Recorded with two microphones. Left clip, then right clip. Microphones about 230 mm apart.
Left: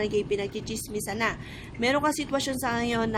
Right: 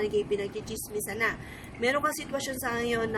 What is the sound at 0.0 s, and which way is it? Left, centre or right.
A man's voice, left.